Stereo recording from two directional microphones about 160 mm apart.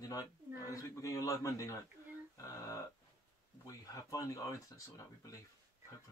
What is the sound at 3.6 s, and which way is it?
Speech, 20° left (ahead or behind).